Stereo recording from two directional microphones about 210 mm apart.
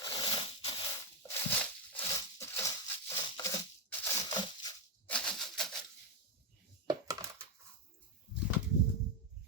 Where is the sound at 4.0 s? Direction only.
15° left (ahead or behind).